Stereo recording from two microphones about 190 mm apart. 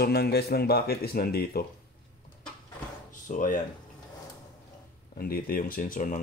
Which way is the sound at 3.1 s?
45° left (ahead or behind).